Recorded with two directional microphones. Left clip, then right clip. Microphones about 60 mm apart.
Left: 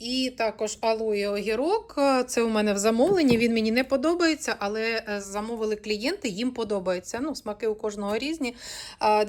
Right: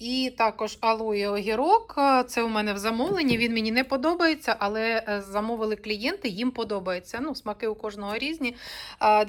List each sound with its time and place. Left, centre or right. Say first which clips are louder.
0.0 s speech: right 2 dB; left
2.3 s a woman's voice: left 2 dB; left
5.6 s a woman's voice: left 1 dB; left
7.8 s speech: left 2 dB; left
9.0 s speech: right 2 dB; left